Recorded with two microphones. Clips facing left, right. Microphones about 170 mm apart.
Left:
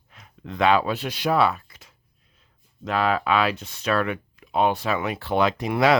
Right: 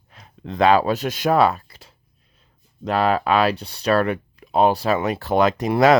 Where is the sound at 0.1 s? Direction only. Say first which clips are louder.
Right 4 dB; 30° right (ahead or behind).